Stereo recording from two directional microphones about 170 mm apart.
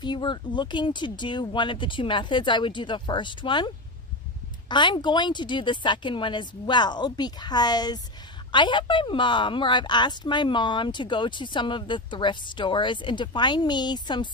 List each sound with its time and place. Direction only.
0.0 s a woman's voice: 25° left (ahead or behind)